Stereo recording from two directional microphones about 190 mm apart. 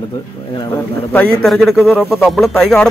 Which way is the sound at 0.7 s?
10° left (ahead or behind).